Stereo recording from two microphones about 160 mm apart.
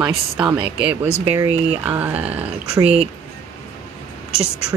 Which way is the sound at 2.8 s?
40° right (ahead or behind).